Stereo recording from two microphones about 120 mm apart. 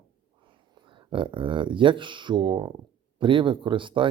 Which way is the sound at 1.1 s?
45° right (ahead or behind).